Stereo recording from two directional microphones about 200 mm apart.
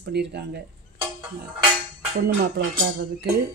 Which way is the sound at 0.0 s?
55° right (ahead or behind).